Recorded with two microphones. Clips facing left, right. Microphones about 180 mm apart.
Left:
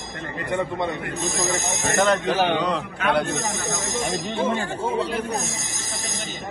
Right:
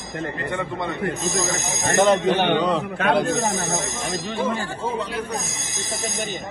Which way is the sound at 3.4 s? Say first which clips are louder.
Right 4 dB; 60° right (ahead or behind).